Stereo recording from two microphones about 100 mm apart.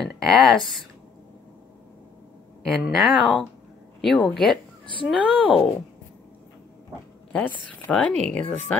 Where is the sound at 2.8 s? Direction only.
5° right (ahead or behind).